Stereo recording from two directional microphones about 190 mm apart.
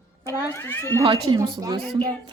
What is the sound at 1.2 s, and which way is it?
Speech, 20° right (ahead or behind).